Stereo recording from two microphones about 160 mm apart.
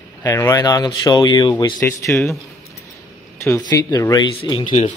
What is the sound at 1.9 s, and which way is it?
Speech, 15° left (ahead or behind).